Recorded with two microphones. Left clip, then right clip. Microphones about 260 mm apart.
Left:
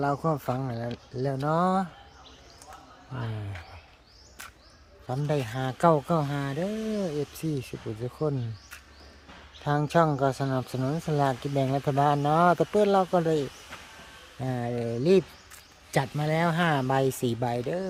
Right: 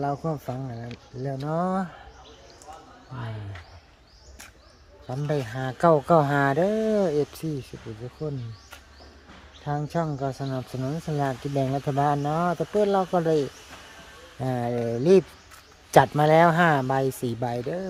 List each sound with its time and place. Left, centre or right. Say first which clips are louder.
0.0 s speech: left 1 dB; centre
5.0 s speech: right 1 dB; centre
8.0 s speech: left 4 dB; left
9.6 s speech: left 5 dB; centre
14.4 s speech: right 4 dB; centre